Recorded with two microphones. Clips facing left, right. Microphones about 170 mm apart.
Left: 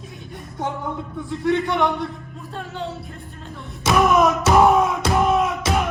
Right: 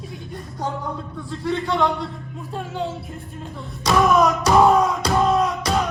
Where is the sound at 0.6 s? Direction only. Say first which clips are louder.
Left 1 dB; 20° left (ahead or behind).